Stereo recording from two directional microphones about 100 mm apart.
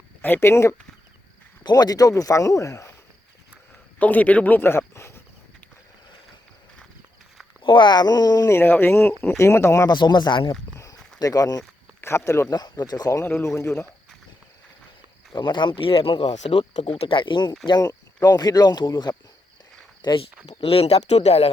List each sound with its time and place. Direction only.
0.3 s speech: 30° left (ahead or behind)
1.6 s speech: 40° left (ahead or behind)
3.9 s speech: 15° left (ahead or behind)
7.6 s speech: 55° left (ahead or behind)
8.4 s speech: 25° left (ahead or behind)
9.9 s speech: 50° left (ahead or behind)
11.2 s speech: 35° left (ahead or behind)
11.9 s speech: 25° left (ahead or behind)
12.5 s speech: 40° left (ahead or behind)
13.2 s speech: 25° left (ahead or behind)
15.4 s speech: 50° left (ahead or behind)
17.7 s speech: 40° left (ahead or behind)
20.5 s speech: 75° left (ahead or behind); by 21.5 s 90° left